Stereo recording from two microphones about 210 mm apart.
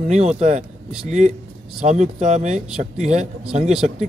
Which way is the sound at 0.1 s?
35° right (ahead or behind).